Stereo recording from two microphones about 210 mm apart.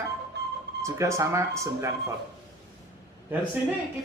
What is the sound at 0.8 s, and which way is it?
A woman's voice, 15° right (ahead or behind).